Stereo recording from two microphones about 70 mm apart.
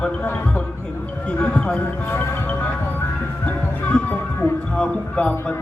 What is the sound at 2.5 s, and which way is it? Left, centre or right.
Music, left.